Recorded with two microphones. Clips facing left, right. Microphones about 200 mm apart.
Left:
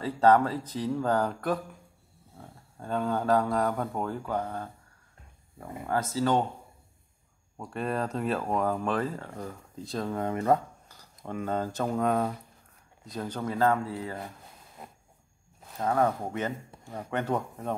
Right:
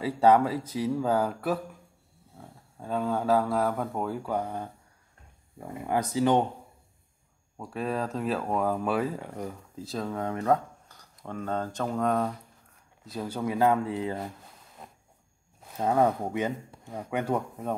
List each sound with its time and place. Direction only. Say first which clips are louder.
0.0 s speech: right 1 dB; 10° right (ahead or behind)
7.5 s speech: even; centre (ahead or behind)
13.0 s speech: right 2 dB; 5° right (ahead or behind)
15.8 s speech: right 2 dB; 20° right (ahead or behind)